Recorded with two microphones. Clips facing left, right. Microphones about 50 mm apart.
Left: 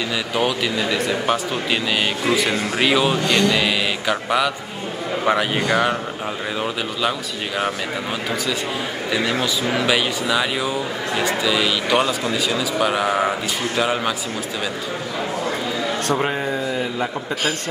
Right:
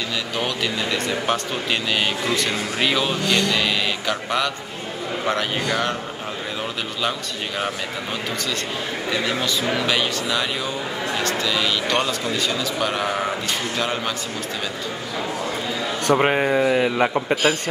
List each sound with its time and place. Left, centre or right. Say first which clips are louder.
0.4 s a man's voice: left 4 dB; centre
7.0 s a man's voice: left 1 dB; centre
9.1 s speech: left 2 dB; centre
16.1 s a man's voice: right 6 dB; right
16.5 s speech: right 5 dB; right